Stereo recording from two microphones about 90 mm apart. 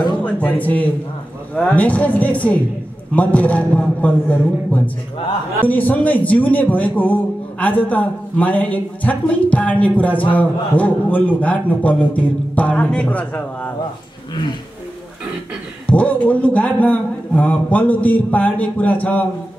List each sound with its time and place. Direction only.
0.2 s speech: 15° left (ahead or behind)
5.6 s speech: 20° left (ahead or behind)
14.3 s speech: 60° left (ahead or behind)
15.9 s speech: 15° left (ahead or behind)